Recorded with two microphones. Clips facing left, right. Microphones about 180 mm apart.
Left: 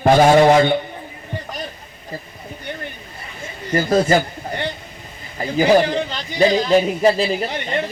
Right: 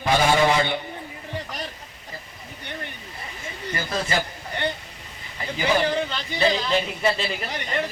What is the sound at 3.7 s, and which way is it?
Speech, 45° left (ahead or behind).